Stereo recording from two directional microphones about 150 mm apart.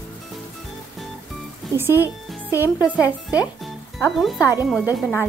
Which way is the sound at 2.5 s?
20° left (ahead or behind).